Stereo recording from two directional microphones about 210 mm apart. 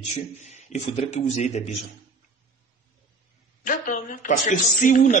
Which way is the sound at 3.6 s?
40° left (ahead or behind).